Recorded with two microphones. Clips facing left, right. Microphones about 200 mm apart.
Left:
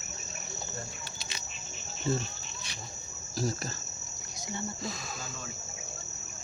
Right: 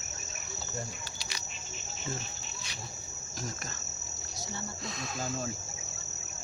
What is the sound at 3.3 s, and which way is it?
Cricket, 35° left (ahead or behind).